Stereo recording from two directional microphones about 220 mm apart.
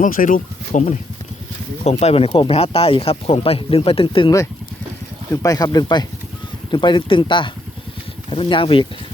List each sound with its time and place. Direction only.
0.0 s speech: 35° left (ahead or behind)